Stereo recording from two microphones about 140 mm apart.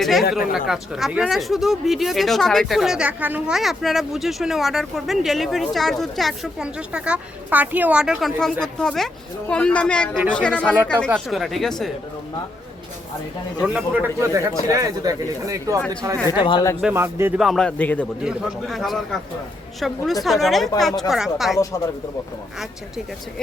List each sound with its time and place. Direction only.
0.0 s speech: centre (ahead or behind)
0.3 s speech: 90° left
0.7 s speech: 5° right (ahead or behind)
13.6 s speech: 10° right (ahead or behind)
16.3 s speech: 30° left (ahead or behind)
16.9 s speech: 20° right (ahead or behind)
17.3 s speech: centre (ahead or behind)
18.2 s speech: 5° right (ahead or behind)